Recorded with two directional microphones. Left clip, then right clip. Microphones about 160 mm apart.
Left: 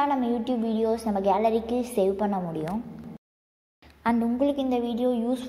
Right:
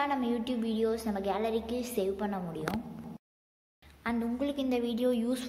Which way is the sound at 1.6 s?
15° left (ahead or behind).